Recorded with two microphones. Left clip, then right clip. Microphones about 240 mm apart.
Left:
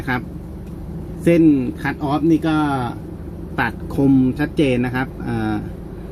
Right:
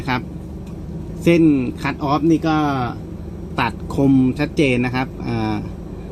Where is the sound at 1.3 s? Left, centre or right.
Right.